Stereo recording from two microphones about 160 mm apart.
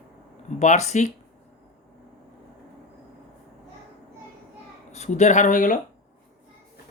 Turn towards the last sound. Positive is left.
turn(degrees=55)  # may be behind; listen again after turning